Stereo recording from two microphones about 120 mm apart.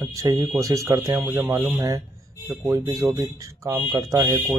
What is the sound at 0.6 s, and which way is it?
Speech, 30° right (ahead or behind).